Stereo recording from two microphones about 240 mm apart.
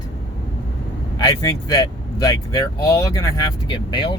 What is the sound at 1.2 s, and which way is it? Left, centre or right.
Speech, centre.